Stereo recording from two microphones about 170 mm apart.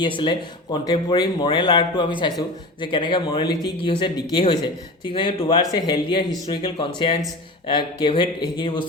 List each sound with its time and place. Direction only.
0.0 s speech: 25° left (ahead or behind)